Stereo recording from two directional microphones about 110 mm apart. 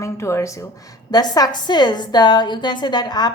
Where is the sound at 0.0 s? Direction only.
25° left (ahead or behind).